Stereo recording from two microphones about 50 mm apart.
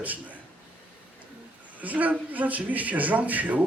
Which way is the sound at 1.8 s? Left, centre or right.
Right.